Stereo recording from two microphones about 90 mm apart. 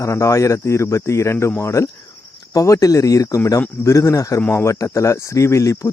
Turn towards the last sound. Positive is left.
turn(degrees=35)  # may be behind; listen again after turning